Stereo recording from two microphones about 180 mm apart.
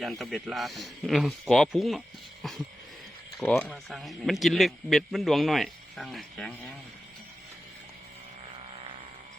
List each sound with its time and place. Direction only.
0.0 s a man's voice: centre (ahead or behind)
3.4 s speech: 10° left (ahead or behind)
3.7 s a man's voice: centre (ahead or behind)